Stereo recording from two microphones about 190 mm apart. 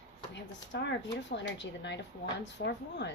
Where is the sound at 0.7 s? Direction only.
65° left (ahead or behind).